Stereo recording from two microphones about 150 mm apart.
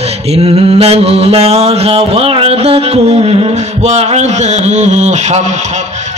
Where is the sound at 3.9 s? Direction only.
50° right (ahead or behind).